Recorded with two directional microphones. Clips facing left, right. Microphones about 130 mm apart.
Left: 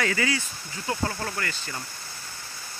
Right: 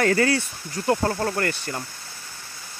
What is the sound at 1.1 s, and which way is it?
Speech, 45° right (ahead or behind).